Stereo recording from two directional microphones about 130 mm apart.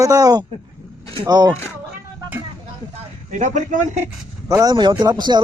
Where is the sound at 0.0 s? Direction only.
25° right (ahead or behind).